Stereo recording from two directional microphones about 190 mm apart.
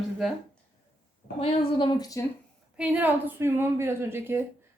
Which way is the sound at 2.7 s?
5° right (ahead or behind).